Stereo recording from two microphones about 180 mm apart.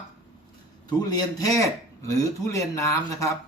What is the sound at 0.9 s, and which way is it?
Speech, 20° left (ahead or behind).